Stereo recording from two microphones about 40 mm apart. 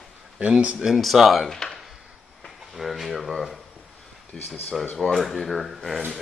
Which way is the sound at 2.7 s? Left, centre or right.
Centre.